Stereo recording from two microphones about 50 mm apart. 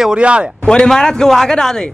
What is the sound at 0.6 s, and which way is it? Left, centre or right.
A man's voice, centre.